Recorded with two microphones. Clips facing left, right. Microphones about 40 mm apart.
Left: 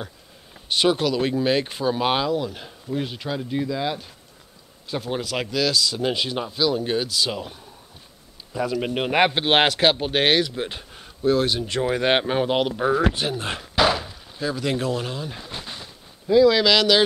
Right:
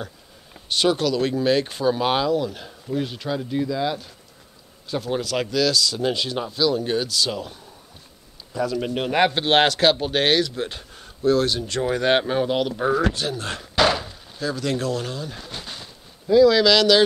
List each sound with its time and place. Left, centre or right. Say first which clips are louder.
0.7 s speech: even; centre
8.5 s speech: even; centre
12.7 s speech: even; centre
13.0 s speech: left 1 dB; left
13.7 s a sound: right 1 dB; centre
14.4 s speech: even; centre